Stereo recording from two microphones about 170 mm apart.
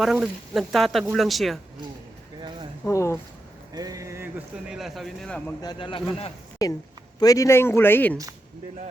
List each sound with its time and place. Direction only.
0.0 s speech: 5° right (ahead or behind)
2.8 s speech: 15° left (ahead or behind)
3.8 s speech: 20° right (ahead or behind); by 5.4 s centre (ahead or behind)
5.6 s speech: 30° left (ahead or behind)
6.6 s speech: 20° left (ahead or behind)